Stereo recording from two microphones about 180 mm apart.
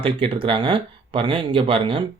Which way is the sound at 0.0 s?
30° right (ahead or behind).